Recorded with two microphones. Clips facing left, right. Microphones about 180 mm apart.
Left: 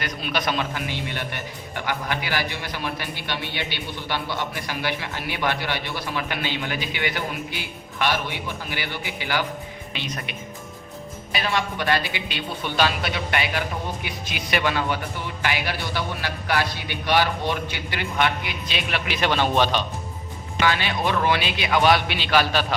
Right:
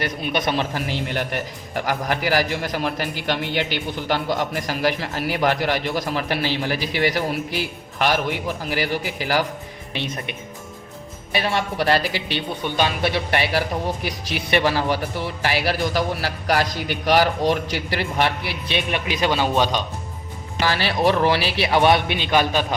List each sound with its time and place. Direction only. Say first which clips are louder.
0.0 s a man's voice: right 3 dB; 25° right (ahead or behind)
0.7 s speech: right 4 dB; 40° right (ahead or behind)
11.3 s speech: right 3 dB; 30° right (ahead or behind)
12.6 s speech: right 1 dB; 20° right (ahead or behind); by 18.5 s 35° right (ahead or behind)
18.9 s a man's voice: right 1 dB; 10° right (ahead or behind)
20.6 s speech: right 2 dB; 35° right (ahead or behind); by 22.6 s 20° right (ahead or behind)